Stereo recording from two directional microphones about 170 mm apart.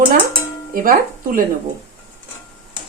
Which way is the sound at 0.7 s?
55° right (ahead or behind).